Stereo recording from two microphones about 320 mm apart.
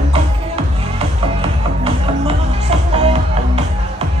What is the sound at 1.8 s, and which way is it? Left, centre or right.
Music, centre.